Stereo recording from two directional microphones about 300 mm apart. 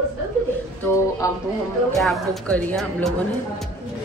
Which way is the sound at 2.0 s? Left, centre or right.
Centre.